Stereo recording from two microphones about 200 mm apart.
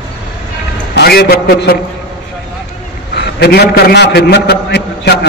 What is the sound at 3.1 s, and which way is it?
A man's voice, 55° left (ahead or behind).